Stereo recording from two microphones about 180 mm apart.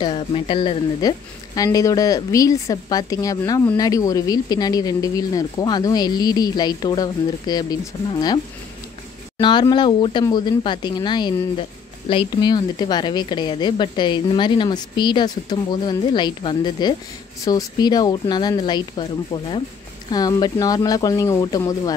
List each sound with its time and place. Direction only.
0.0 s speech: 30° left (ahead or behind)
9.4 s speech: 25° left (ahead or behind)
20.1 s speech: 20° left (ahead or behind)